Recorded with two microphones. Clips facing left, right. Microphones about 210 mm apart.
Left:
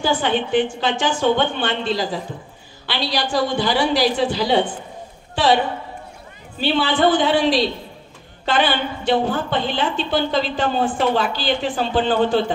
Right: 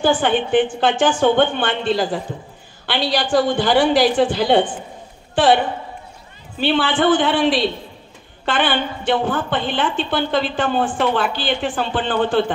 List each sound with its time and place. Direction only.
0.0 s a woman's voice: 50° right (ahead or behind)
6.6 s a woman's voice: 50° right (ahead or behind)